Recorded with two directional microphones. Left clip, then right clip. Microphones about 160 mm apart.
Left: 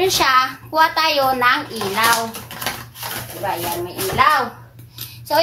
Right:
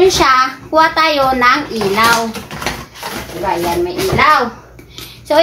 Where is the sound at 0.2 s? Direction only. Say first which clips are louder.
Right 4 dB; 25° right (ahead or behind).